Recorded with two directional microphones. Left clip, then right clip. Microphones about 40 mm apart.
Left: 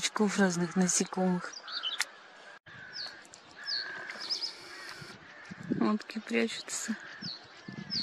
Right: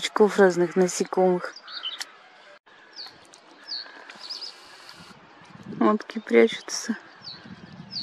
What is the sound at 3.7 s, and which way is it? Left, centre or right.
Chirp, centre.